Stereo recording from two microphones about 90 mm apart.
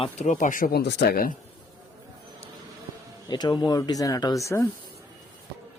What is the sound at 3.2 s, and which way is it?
Speech, 50° left (ahead or behind).